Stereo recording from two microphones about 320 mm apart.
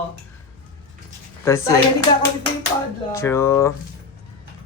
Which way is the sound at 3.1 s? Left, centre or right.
Centre.